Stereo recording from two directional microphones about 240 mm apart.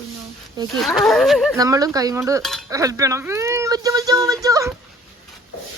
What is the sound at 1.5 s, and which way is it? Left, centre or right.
Speech, centre.